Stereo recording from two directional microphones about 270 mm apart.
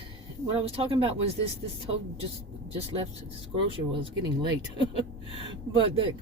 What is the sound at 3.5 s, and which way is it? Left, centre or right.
Speech, centre.